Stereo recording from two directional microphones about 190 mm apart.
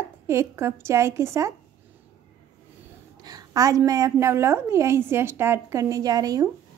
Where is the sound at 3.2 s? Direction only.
20° right (ahead or behind).